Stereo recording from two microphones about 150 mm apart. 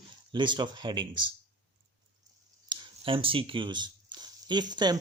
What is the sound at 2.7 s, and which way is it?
Speech, 35° right (ahead or behind).